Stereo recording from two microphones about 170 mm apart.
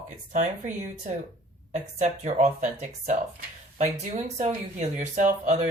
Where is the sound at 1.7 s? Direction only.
45° right (ahead or behind).